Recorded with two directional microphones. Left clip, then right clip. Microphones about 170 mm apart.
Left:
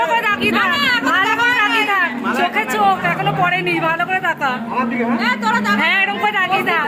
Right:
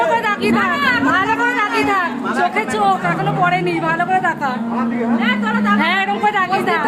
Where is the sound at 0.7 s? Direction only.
60° left (ahead or behind).